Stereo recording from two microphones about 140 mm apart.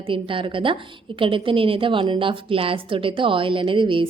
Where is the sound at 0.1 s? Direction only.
40° right (ahead or behind).